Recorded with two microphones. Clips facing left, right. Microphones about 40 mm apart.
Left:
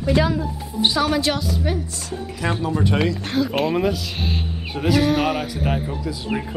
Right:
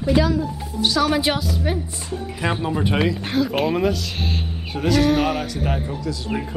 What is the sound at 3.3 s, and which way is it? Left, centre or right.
Speech, centre.